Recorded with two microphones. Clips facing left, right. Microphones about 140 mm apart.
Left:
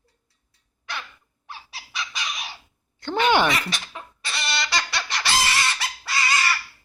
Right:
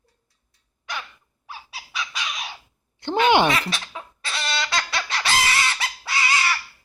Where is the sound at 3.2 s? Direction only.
20° right (ahead or behind).